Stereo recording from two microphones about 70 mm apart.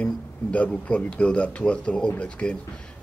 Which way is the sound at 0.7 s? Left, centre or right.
Centre.